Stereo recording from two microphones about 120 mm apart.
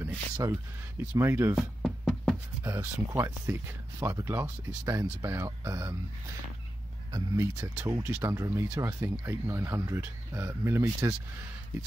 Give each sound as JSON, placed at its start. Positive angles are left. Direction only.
{"t": 0.0, "sound": "speech", "side_deg": -20}
{"t": 1.5, "sound": "music", "side_deg": -5}
{"t": 2.6, "sound": "speech", "side_deg": -25}
{"t": 7.1, "sound": "speech", "side_deg": -35}
{"t": 7.6, "sound": "speech", "side_deg": -20}